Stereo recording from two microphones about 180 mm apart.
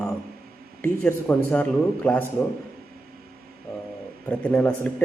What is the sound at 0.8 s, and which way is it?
Speech, 10° left (ahead or behind).